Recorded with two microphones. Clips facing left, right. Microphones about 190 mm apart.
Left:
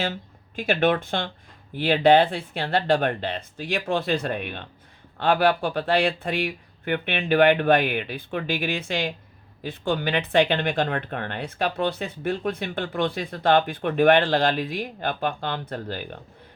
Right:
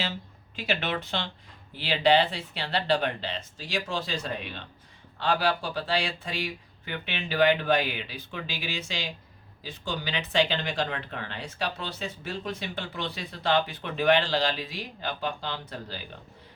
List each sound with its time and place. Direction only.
0.5 s speech: 50° left (ahead or behind)